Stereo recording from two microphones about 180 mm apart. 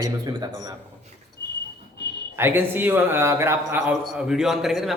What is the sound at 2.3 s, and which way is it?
A man's voice, 10° right (ahead or behind).